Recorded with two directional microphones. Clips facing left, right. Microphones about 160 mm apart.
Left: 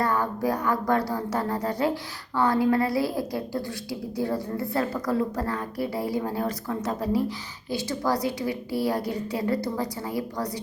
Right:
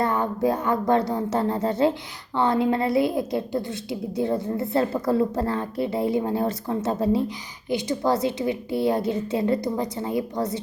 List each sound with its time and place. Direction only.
0.0 s a woman's voice: 20° right (ahead or behind)